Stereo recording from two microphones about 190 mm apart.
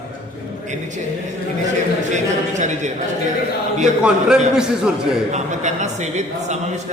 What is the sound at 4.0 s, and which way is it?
A man's voice, 5° right (ahead or behind).